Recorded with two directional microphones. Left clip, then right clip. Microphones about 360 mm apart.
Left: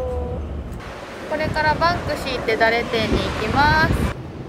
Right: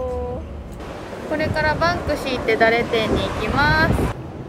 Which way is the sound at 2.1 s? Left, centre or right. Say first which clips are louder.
Right 1 dB; left.